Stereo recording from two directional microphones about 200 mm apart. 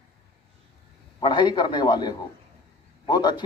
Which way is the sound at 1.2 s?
20° left (ahead or behind).